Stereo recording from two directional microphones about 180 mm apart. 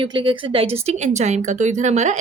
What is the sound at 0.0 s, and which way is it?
A woman's voice, 30° right (ahead or behind).